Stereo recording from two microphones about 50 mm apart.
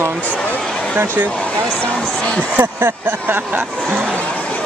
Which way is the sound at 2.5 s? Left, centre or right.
Right.